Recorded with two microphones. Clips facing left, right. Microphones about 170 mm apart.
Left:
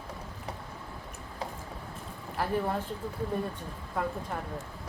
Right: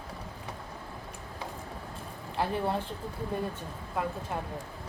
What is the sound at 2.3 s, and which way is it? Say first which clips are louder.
Speech: even; 20° right (ahead or behind).